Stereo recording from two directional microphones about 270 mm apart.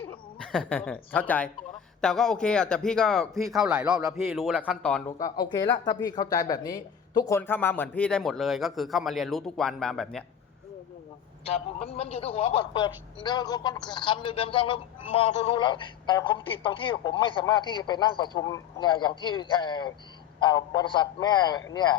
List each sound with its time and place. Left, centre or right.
0.0 s a man's voice: centre
11.4 s a man's voice: left